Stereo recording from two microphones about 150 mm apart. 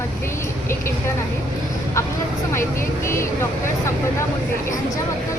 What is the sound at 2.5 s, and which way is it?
Speech, 15° left (ahead or behind).